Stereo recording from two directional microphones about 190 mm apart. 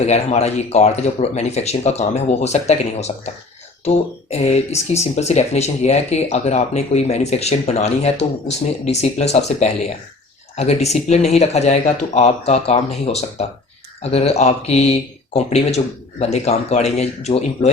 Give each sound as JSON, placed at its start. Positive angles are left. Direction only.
{"t": 0.0, "sound": "speech", "side_deg": 35}